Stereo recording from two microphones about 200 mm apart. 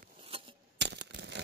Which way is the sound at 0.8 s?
60° right (ahead or behind).